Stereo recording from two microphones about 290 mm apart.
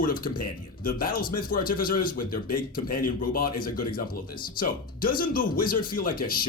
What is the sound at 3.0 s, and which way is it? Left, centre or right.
Speech, left.